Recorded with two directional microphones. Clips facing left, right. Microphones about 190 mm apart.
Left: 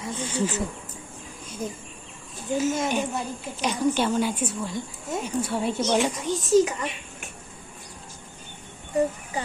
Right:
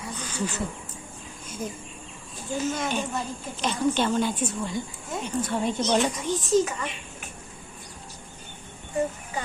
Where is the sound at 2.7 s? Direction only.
20° left (ahead or behind).